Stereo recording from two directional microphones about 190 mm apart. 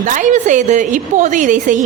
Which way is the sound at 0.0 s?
40° right (ahead or behind).